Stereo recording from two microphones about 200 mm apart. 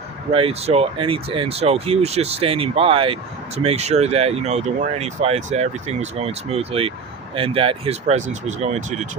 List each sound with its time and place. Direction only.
0.3 s speech: 30° right (ahead or behind)